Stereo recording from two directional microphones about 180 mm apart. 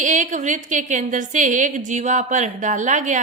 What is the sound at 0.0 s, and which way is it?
A woman's voice, 45° right (ahead or behind).